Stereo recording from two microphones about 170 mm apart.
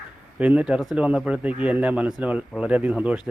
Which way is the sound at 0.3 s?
10° right (ahead or behind).